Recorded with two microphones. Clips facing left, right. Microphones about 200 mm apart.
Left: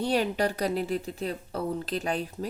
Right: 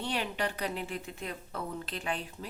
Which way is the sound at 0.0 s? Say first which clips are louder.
Left 8 dB; 40° left (ahead or behind).